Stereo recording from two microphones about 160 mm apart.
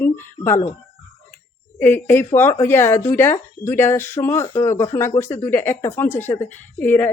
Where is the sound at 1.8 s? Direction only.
15° left (ahead or behind).